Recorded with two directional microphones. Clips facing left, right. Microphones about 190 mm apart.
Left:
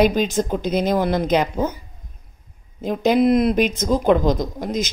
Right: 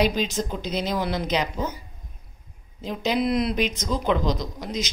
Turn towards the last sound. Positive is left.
turn(degrees=50)  # may be behind; listen again after turning